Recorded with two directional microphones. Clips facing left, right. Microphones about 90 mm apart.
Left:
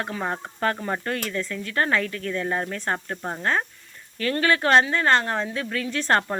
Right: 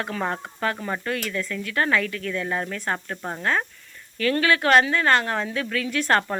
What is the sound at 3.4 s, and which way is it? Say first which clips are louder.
Speech: right 1 dB; 30° left (ahead or behind).